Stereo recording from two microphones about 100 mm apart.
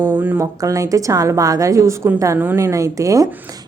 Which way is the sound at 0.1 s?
20° right (ahead or behind).